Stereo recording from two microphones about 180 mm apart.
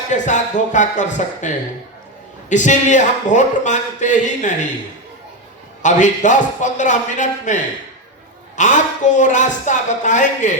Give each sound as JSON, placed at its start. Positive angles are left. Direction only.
{"t": 0.1, "sound": "a man's voice", "side_deg": 45}
{"t": 5.8, "sound": "a man's voice", "side_deg": 45}